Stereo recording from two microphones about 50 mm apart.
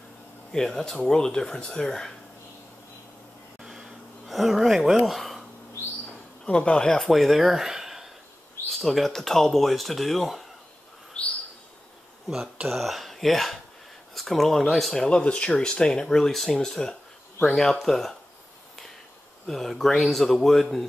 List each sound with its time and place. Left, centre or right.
0.5 s speech: centre
3.6 s a sound: centre
4.9 s speech: centre
6.4 s speech: centre
7.0 s speech: centre
11.2 s bird: left
12.6 s speech: centre
15.0 s speech: left; by 18.1 s centre
19.4 s speech: centre